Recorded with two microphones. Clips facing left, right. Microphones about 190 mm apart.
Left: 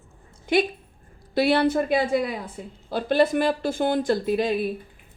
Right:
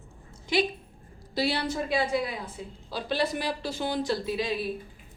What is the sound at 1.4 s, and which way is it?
A woman's voice, 55° left (ahead or behind).